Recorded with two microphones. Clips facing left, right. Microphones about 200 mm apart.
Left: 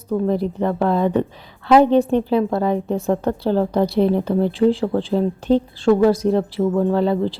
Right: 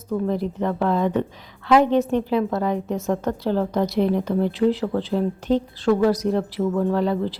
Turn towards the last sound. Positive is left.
turn(degrees=30)  # may be behind; listen again after turning